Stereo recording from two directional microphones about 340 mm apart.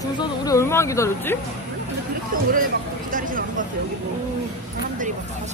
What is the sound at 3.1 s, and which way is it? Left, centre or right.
Speech, right.